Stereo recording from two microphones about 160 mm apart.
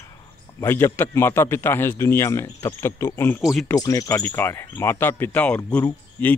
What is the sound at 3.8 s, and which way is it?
A man's voice, 20° left (ahead or behind).